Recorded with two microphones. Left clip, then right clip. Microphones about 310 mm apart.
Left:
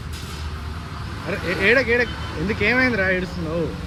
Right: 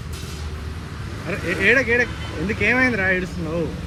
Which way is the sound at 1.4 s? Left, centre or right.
Left.